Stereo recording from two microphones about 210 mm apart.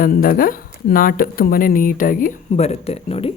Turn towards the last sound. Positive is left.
turn(degrees=25)  # may be behind; listen again after turning